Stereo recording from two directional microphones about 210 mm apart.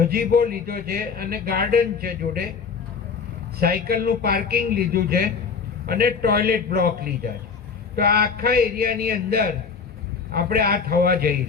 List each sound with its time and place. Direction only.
0.0 s speech: 45° right (ahead or behind)
3.6 s speech: 45° right (ahead or behind)